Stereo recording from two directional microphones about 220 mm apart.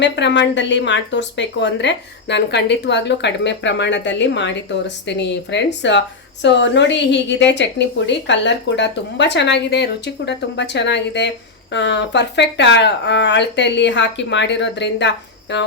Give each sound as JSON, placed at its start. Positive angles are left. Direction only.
{"t": 0.0, "sound": "speech", "side_deg": 55}